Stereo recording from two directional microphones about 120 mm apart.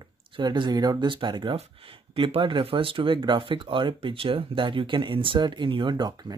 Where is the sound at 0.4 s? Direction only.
35° right (ahead or behind).